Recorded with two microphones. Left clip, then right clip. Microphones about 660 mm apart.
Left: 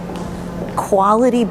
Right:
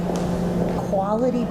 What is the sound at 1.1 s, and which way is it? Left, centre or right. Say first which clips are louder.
Speech: left 9 dB; left.